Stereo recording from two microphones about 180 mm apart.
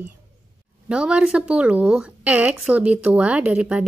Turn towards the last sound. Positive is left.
turn(degrees=-5)  # may be behind; listen again after turning